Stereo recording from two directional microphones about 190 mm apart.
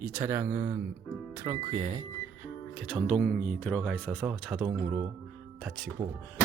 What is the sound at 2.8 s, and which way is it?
Speech, 5° left (ahead or behind).